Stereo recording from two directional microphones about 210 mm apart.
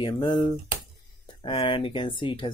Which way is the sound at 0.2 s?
20° left (ahead or behind).